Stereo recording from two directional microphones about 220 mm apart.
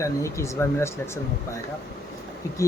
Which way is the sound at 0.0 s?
15° left (ahead or behind).